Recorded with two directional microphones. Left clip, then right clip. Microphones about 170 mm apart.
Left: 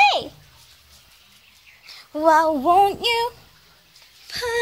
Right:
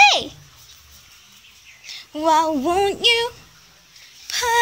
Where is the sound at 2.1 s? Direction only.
20° left (ahead or behind).